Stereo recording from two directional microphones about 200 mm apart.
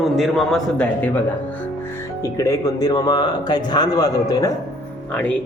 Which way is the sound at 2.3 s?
15° left (ahead or behind).